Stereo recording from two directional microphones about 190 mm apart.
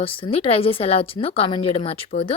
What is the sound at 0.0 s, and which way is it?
A woman's voice, 30° left (ahead or behind).